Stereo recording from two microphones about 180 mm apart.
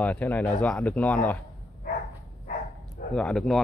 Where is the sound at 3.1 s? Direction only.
5° left (ahead or behind).